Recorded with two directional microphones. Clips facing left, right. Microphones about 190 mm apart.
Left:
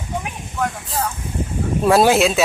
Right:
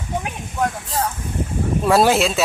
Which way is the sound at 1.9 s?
Centre (ahead or behind).